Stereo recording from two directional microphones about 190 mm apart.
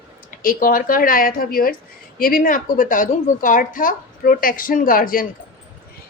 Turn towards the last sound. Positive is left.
turn(degrees=45)  # may be behind; listen again after turning